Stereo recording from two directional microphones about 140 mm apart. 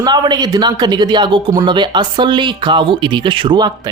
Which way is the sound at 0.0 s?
30° right (ahead or behind).